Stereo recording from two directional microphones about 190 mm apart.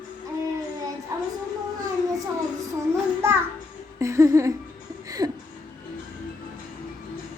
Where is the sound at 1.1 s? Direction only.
15° right (ahead or behind).